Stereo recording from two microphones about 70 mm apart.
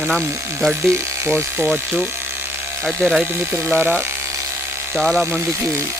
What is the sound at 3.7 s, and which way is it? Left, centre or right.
Speech, right.